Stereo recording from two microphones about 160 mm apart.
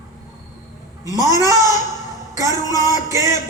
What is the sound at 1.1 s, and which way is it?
A man's voice, 20° right (ahead or behind).